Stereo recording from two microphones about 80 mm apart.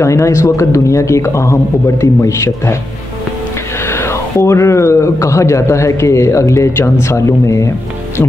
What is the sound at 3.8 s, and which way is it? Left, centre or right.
Speech, left.